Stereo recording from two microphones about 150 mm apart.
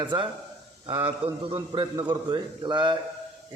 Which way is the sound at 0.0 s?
30° right (ahead or behind).